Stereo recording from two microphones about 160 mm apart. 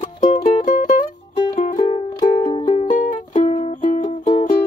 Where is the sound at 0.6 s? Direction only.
55° left (ahead or behind).